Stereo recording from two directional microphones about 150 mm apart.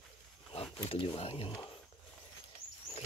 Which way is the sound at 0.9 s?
35° left (ahead or behind).